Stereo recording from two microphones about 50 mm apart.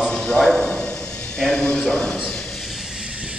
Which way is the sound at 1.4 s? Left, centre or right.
Centre.